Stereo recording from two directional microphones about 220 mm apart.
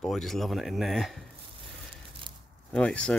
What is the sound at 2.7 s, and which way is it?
Speech, 5° left (ahead or behind).